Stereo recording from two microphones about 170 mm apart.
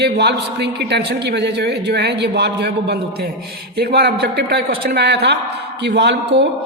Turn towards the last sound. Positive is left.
turn(degrees=-90)